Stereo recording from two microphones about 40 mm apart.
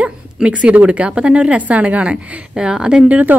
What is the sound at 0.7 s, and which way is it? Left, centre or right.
A woman's voice, right.